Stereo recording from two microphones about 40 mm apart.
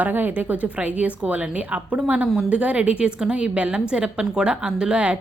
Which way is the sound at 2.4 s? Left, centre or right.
Right.